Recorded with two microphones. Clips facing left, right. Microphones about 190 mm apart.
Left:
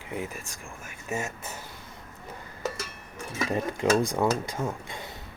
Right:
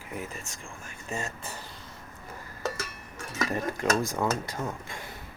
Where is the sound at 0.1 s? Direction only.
20° left (ahead or behind).